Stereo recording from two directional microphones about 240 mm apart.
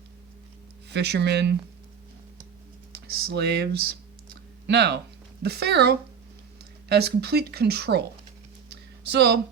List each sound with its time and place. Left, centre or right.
0.9 s speech: right
3.2 s speech: right
9.0 s speech: right